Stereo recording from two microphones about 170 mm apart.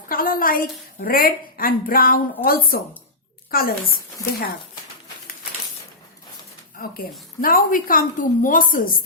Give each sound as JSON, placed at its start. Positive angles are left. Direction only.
{"t": 0.1, "sound": "a woman's voice", "side_deg": 55}
{"t": 7.4, "sound": "a woman's voice", "side_deg": 55}